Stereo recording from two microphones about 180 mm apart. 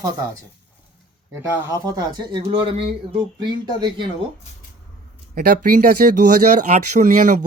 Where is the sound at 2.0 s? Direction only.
25° right (ahead or behind).